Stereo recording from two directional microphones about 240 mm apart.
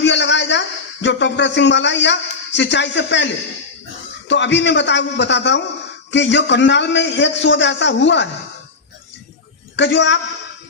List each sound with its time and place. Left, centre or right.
0.0 s a sound: left
1.0 s a man's voice: left
9.7 s a man's voice: left